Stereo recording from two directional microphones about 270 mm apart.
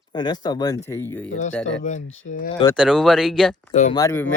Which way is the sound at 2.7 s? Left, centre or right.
Centre.